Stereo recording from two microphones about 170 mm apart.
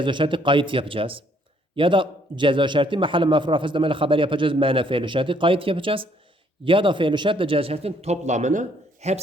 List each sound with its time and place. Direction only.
0.0 s a man's voice: 30° right (ahead or behind)